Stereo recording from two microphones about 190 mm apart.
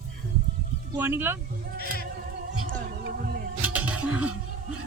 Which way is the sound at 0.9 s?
10° right (ahead or behind).